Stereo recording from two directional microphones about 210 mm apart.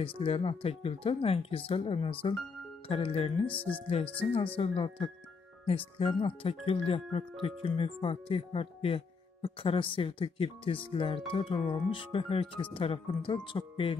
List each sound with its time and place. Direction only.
0.2 s speech: 25° left (ahead or behind)
3.4 s speech: 5° left (ahead or behind)
4.6 s speech: 25° left (ahead or behind)